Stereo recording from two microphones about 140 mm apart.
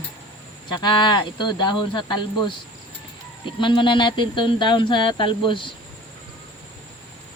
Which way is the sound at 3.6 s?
35° left (ahead or behind).